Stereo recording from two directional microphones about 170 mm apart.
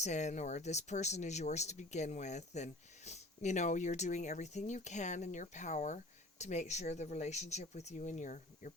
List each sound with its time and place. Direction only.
0.0 s speech: 45° left (ahead or behind)